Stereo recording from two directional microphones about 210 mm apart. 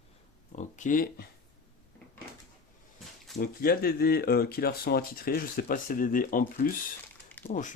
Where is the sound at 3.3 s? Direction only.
45° left (ahead or behind).